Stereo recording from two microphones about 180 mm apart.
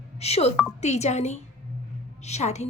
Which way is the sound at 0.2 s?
35° left (ahead or behind).